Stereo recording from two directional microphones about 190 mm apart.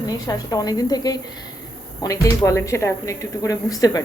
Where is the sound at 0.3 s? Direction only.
20° left (ahead or behind).